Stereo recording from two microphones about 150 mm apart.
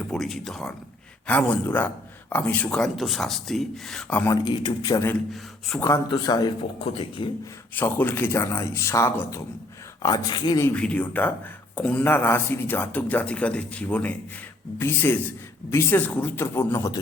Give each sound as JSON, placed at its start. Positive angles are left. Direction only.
{"t": 0.1, "sound": "speech", "side_deg": 0}
{"t": 4.2, "sound": "speech", "side_deg": 20}
{"t": 5.3, "sound": "speech", "side_deg": 0}
{"t": 6.1, "sound": "a man's voice", "side_deg": 30}
{"t": 7.8, "sound": "speech", "side_deg": 15}
{"t": 10.7, "sound": "speech", "side_deg": 10}